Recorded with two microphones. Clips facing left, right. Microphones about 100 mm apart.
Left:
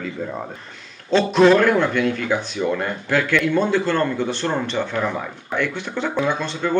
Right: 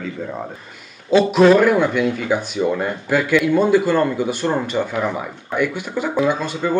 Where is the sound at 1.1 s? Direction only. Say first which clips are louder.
Right 2 dB; 5° right (ahead or behind).